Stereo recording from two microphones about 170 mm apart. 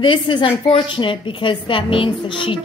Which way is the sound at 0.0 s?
30° left (ahead or behind).